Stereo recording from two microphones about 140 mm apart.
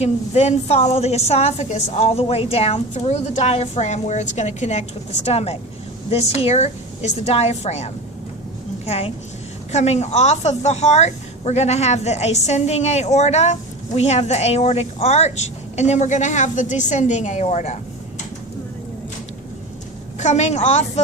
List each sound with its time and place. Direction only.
0.0 s a woman's voice: 50° left (ahead or behind)
8.9 s a woman's voice: 45° left (ahead or behind)
20.1 s a woman's voice: 55° left (ahead or behind)